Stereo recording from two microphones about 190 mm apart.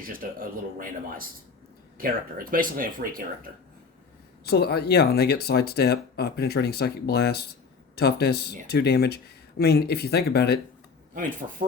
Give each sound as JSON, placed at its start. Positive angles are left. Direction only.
{"t": 0.1, "sound": "speech", "side_deg": -50}
{"t": 4.4, "sound": "speech", "side_deg": 55}
{"t": 11.1, "sound": "speech", "side_deg": -45}